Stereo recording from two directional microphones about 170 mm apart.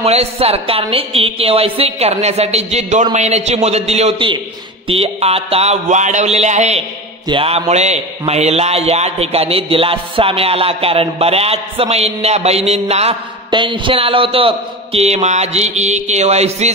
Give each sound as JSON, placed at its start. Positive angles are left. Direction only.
{"t": 0.0, "sound": "a man's voice", "side_deg": -35}